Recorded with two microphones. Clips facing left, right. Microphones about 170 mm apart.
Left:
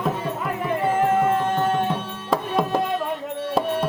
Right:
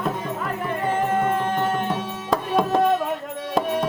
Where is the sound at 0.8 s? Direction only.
10° left (ahead or behind).